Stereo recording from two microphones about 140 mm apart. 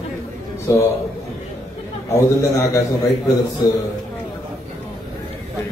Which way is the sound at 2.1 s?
20° left (ahead or behind).